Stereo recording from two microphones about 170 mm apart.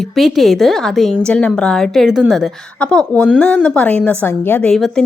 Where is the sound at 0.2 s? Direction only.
Centre (ahead or behind).